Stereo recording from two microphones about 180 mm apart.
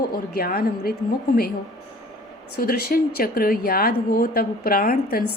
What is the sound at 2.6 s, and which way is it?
A woman's voice, 55° left (ahead or behind).